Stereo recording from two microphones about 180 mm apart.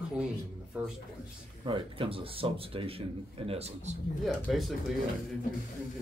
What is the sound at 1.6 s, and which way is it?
Speech, 25° right (ahead or behind).